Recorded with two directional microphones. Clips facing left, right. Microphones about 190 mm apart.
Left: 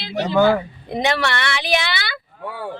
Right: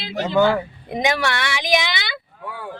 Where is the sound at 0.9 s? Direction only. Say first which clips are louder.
Left 1 dB; 10° right (ahead or behind).